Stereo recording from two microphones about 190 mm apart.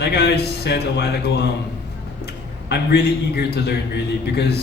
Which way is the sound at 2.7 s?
60° left (ahead or behind).